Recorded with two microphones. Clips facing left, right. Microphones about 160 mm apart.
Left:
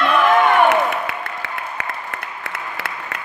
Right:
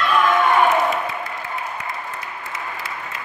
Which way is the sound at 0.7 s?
70° left (ahead or behind).